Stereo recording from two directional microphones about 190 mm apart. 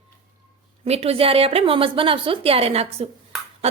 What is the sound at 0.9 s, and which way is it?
A woman's voice, 30° right (ahead or behind).